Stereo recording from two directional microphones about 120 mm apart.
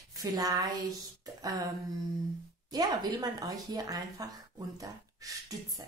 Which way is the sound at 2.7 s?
35° right (ahead or behind).